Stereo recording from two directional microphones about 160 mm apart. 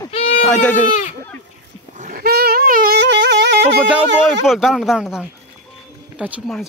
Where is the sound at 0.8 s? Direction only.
50° left (ahead or behind).